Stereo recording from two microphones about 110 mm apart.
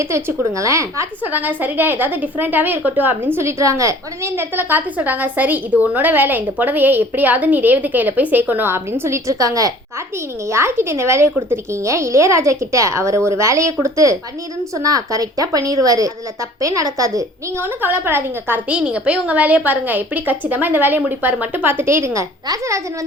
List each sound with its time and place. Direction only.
0.0 s a woman's voice: 25° right (ahead or behind)
1.2 s a woman's voice: 15° right (ahead or behind)
17.8 s a woman's voice: 20° right (ahead or behind)